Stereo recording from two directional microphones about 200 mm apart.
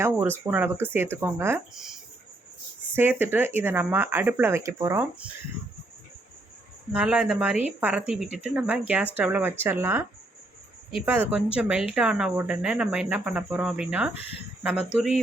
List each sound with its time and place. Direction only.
0.0 s speech: 10° right (ahead or behind)
1.7 s speech: centre (ahead or behind)
7.0 s speech: 5° right (ahead or behind)